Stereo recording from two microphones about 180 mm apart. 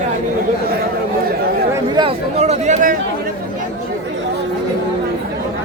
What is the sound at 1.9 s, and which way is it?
Chatter, 35° right (ahead or behind).